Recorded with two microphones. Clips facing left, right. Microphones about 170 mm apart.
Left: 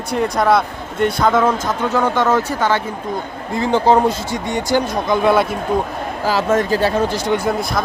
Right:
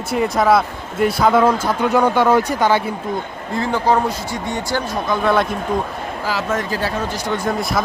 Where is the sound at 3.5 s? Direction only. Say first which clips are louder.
Left 3 dB; 25° left (ahead or behind).